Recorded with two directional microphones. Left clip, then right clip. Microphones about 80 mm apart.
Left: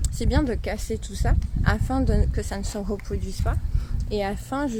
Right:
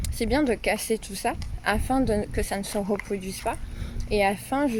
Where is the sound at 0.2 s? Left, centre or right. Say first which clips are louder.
Right 2 dB; left.